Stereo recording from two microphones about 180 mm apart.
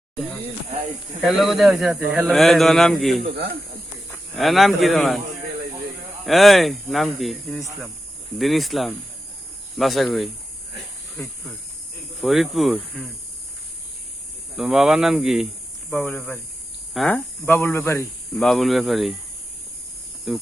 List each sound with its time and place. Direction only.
1.2 s speech: centre (ahead or behind)
3.2 s speech: 65° right (ahead or behind)
4.4 s speech: centre (ahead or behind)
6.2 s speech: centre (ahead or behind)
14.5 s speech: centre (ahead or behind)
15.9 s speech: 10° left (ahead or behind)
17.2 s speech: 10° left (ahead or behind)
18.3 s speech: centre (ahead or behind)
20.3 s speech: centre (ahead or behind)